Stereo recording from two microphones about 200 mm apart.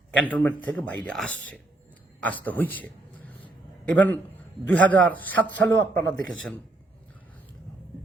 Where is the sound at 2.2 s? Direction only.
10° left (ahead or behind).